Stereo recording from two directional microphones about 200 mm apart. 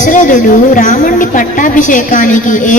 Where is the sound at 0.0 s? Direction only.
40° left (ahead or behind).